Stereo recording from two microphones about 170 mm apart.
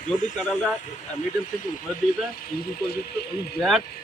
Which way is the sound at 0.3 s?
5° left (ahead or behind).